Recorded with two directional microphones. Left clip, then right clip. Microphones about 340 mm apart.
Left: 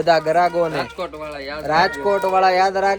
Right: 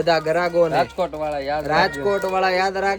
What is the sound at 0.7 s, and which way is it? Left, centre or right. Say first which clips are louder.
Speech: right 4 dB; right.